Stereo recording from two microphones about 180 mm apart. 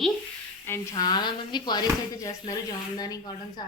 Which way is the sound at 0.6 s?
20° left (ahead or behind).